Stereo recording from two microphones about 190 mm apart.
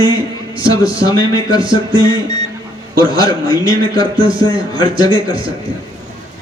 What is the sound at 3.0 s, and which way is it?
A man's voice, 20° left (ahead or behind).